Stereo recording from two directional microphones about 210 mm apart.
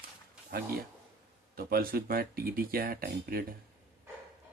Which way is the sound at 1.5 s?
45° right (ahead or behind).